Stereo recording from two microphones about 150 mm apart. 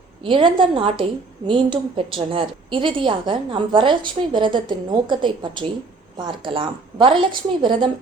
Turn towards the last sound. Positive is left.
turn(degrees=-35)  # may be behind; listen again after turning